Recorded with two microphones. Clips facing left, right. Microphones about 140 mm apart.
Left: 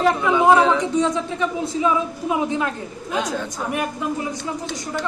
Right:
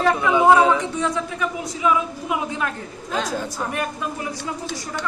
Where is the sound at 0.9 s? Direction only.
20° left (ahead or behind).